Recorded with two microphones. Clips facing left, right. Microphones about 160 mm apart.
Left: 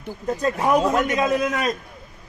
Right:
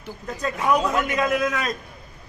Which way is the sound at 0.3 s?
40° left (ahead or behind).